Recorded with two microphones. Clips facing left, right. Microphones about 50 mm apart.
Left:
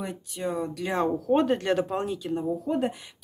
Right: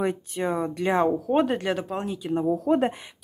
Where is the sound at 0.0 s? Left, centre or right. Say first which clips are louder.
Right 6 dB; right; by 2.3 s centre.